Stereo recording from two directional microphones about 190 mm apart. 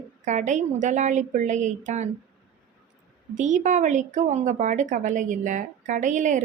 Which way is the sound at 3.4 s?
40° right (ahead or behind).